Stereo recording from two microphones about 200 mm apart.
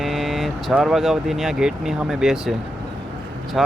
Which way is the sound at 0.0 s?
Centre (ahead or behind).